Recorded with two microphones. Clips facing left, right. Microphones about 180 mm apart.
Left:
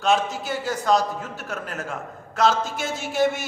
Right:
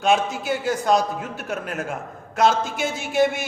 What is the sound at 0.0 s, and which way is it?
A man's voice, 10° right (ahead or behind).